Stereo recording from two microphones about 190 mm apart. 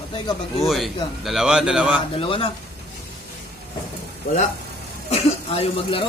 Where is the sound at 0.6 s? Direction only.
Centre (ahead or behind).